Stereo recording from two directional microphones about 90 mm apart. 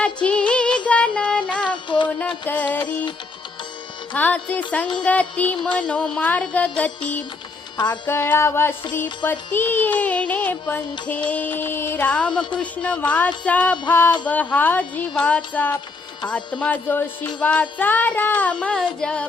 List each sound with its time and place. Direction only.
0.0 s music: 15° left (ahead or behind)
4.1 s music: 15° left (ahead or behind)
7.9 s music: 25° left (ahead or behind)